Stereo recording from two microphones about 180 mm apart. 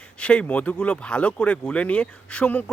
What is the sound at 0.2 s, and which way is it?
Speech, 5° left (ahead or behind).